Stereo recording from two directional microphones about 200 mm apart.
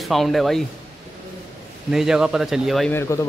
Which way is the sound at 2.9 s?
15° left (ahead or behind).